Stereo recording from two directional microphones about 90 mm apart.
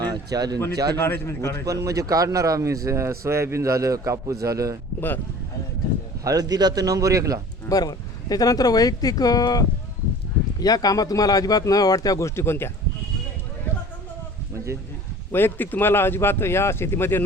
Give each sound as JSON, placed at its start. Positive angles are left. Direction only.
{"t": 0.0, "sound": "a man's voice", "side_deg": -45}
{"t": 0.9, "sound": "speech", "side_deg": 25}
{"t": 1.6, "sound": "a man's voice", "side_deg": -40}
{"t": 4.9, "sound": "speech", "side_deg": 20}
{"t": 6.2, "sound": "a man's voice", "side_deg": -45}
{"t": 7.7, "sound": "speech", "side_deg": 45}
{"t": 12.4, "sound": "speech", "side_deg": 25}
{"t": 15.3, "sound": "speech", "side_deg": 25}